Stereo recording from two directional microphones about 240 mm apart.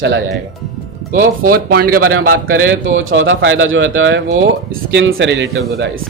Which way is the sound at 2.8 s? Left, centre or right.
Right.